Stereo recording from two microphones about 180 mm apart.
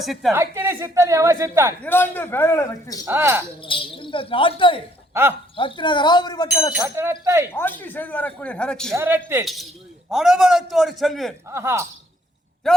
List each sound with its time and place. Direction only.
0.0 s a man's voice: centre (ahead or behind)
0.3 s speech: 15° right (ahead or behind)
1.8 s speech: 10° left (ahead or behind)
3.0 s speech: 15° right (ahead or behind)
3.6 s speech: 30° left (ahead or behind)
6.7 s speech: 15° right (ahead or behind)
7.5 s speech: 10° left (ahead or behind)
9.0 s a man's voice: 10° right (ahead or behind)
11.4 s speech: 15° right (ahead or behind)